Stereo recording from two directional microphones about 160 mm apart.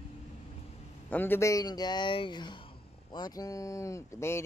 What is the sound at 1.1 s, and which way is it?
Speech, 15° left (ahead or behind).